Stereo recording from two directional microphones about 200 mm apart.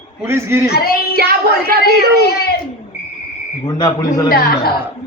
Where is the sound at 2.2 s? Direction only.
50° left (ahead or behind).